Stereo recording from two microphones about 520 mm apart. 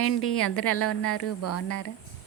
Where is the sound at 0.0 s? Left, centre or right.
Left.